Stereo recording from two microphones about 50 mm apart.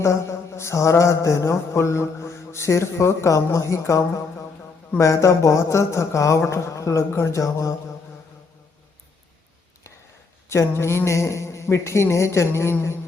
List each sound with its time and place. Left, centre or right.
0.0 s a man's voice: left
10.5 s a man's voice: left